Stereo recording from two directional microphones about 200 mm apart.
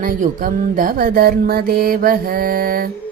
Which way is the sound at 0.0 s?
45° right (ahead or behind).